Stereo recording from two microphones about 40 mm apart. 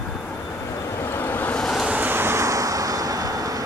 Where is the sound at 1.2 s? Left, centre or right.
Left.